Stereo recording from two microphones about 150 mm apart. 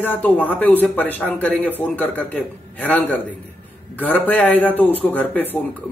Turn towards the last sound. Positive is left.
turn(degrees=10)  # may be behind; listen again after turning